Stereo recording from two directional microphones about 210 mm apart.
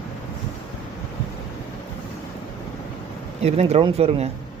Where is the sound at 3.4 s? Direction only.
30° right (ahead or behind).